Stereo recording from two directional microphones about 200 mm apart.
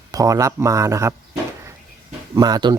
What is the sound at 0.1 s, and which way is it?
Speech, 15° right (ahead or behind).